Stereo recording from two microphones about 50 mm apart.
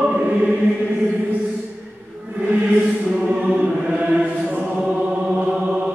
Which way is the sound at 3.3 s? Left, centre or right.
Right.